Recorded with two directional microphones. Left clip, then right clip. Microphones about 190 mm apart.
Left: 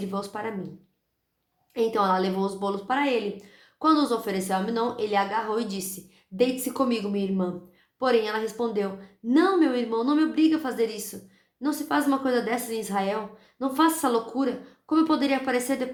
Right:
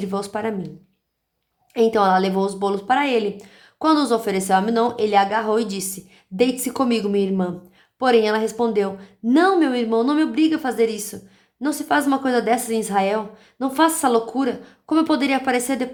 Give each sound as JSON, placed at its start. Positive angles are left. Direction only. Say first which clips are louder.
{"t": 0.0, "sound": "a woman's voice", "louder": "right 7 dB", "side_deg": -45}
{"t": 1.7, "sound": "a woman's voice", "louder": "right 7 dB", "side_deg": -40}